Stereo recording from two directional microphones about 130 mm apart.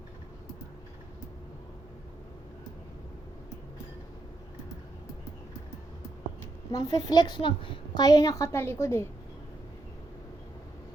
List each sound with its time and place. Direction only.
6.7 s a woman's voice: 30° left (ahead or behind)
8.0 s a woman's voice: 30° left (ahead or behind)